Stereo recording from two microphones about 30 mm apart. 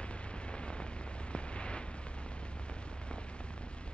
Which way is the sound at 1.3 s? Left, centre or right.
Left.